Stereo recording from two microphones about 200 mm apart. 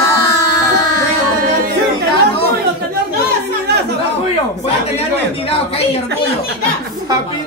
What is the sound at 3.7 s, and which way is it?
Chatter, 55° right (ahead or behind).